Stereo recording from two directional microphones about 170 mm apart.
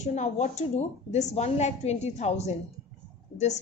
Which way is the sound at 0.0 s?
45° left (ahead or behind).